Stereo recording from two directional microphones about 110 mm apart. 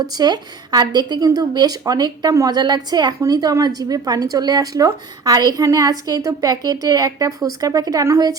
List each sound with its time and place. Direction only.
0.1 s a woman's voice: 40° right (ahead or behind)